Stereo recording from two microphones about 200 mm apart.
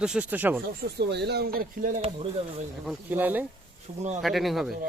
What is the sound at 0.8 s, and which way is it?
Speech, 55° right (ahead or behind).